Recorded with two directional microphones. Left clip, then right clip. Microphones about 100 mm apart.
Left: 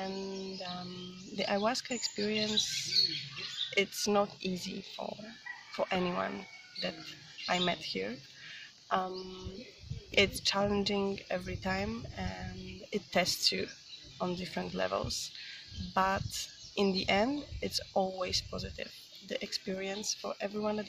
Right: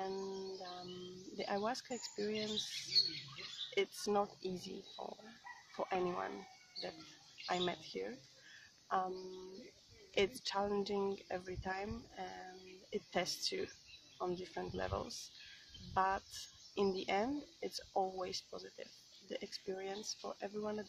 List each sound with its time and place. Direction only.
0.0 s music: 15° right (ahead or behind)
1.3 s speech: 15° right (ahead or behind)
3.7 s speech: 20° right (ahead or behind)
7.4 s speech: 10° right (ahead or behind)
8.8 s music: 15° right (ahead or behind)
10.1 s speech: 20° right (ahead or behind)